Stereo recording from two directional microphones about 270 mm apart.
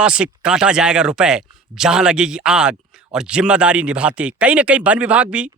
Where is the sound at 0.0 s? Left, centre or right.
Centre.